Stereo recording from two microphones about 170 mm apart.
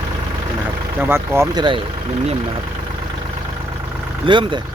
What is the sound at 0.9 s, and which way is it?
Speech, 15° right (ahead or behind).